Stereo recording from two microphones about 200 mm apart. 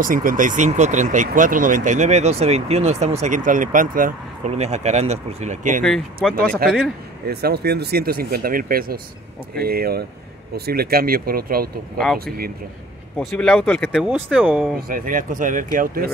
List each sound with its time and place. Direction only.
0.0 s speech: 45° right (ahead or behind)
13.2 s speech: centre (ahead or behind)
13.9 s speech: 5° right (ahead or behind)
14.9 s speech: 45° right (ahead or behind)